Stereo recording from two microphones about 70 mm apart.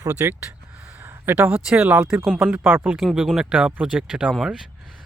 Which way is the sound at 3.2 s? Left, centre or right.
Centre.